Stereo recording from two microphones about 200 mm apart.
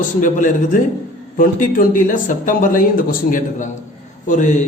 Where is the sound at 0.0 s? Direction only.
40° left (ahead or behind).